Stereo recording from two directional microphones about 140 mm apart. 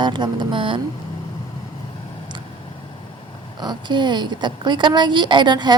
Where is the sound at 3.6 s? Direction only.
30° right (ahead or behind).